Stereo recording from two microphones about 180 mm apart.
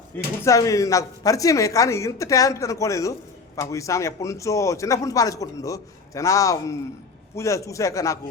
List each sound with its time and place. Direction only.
0.4 s speech: 20° left (ahead or behind)